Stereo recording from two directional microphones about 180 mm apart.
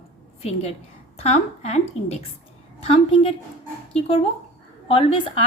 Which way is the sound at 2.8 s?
35° left (ahead or behind).